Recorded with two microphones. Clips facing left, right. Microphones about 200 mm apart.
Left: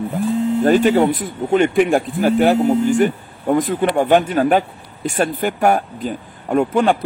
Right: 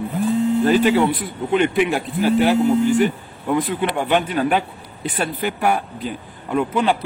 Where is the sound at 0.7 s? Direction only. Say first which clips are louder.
Left 5 dB; 50° left (ahead or behind).